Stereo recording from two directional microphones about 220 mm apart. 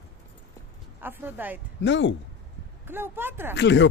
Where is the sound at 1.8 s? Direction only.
55° left (ahead or behind).